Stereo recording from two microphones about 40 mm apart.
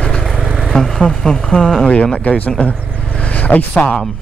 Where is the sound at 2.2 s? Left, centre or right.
Left.